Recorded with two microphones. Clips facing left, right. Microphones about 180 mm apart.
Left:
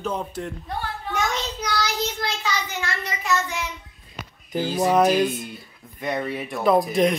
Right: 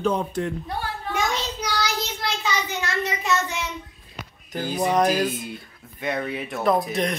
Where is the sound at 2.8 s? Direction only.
25° right (ahead or behind).